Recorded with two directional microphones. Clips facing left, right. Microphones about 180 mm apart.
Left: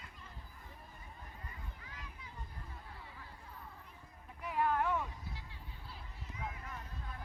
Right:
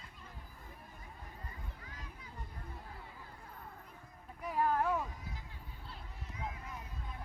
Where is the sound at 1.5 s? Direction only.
40° right (ahead or behind).